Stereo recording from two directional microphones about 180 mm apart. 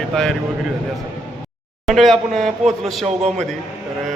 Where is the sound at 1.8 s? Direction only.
Centre (ahead or behind).